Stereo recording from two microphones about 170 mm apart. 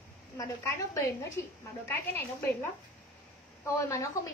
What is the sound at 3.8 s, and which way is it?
Speech, 20° left (ahead or behind).